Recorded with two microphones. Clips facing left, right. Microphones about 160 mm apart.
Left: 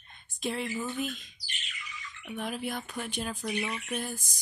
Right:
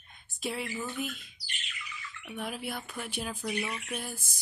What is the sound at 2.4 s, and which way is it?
Speech, 5° right (ahead or behind).